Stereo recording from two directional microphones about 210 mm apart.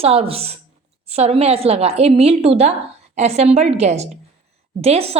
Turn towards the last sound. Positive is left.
turn(degrees=-30)  # may be behind; listen again after turning